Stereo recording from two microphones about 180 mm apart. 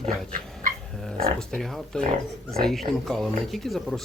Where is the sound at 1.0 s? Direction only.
5° left (ahead or behind).